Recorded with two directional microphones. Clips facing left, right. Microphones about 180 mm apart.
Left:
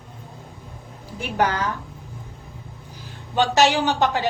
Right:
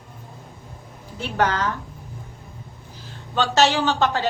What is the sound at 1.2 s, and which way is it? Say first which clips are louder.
Speech: even; 10° left (ahead or behind).